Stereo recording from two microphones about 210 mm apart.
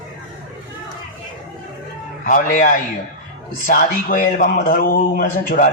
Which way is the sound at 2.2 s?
40° left (ahead or behind).